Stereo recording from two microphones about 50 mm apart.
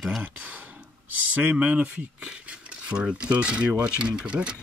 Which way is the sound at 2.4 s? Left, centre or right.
Centre.